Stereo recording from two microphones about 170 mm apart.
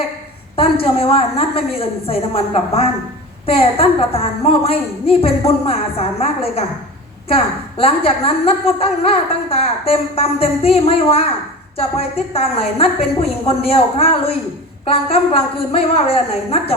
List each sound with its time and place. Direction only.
0.5 s a woman's voice: 35° left (ahead or behind)